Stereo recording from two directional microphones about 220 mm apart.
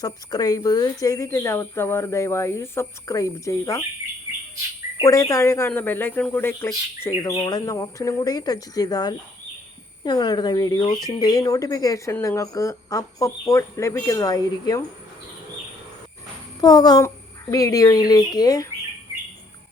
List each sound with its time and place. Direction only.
0.0 s speech: 15° left (ahead or behind)
5.0 s speech: 15° left (ahead or behind)
16.6 s speech: 20° left (ahead or behind)